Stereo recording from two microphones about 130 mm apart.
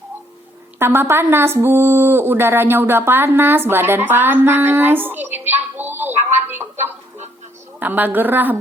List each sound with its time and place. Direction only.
0.8 s a woman's voice: 20° right (ahead or behind)